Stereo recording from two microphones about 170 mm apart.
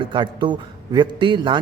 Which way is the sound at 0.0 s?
30° right (ahead or behind).